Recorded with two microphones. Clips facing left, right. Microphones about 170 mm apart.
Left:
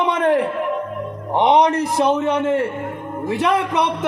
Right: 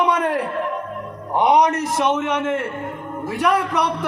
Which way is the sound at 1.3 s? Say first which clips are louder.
Left 1 dB; 25° left (ahead or behind).